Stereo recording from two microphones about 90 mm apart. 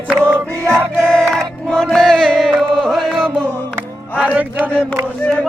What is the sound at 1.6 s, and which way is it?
Chant, 5° left (ahead or behind).